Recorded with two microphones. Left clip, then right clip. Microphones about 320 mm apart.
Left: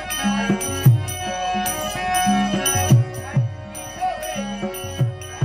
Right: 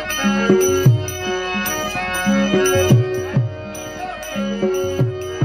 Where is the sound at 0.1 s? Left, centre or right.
Centre.